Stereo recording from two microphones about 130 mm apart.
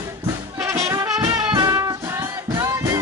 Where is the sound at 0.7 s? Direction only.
25° right (ahead or behind).